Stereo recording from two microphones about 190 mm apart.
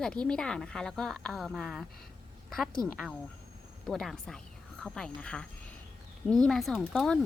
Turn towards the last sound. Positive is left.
turn(degrees=0)  # may be behind; listen again after turning